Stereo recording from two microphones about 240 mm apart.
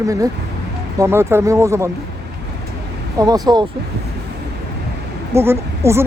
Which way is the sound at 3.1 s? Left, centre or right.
Centre.